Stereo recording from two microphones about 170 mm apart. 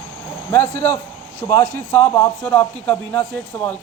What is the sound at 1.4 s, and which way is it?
A man's voice, 20° left (ahead or behind).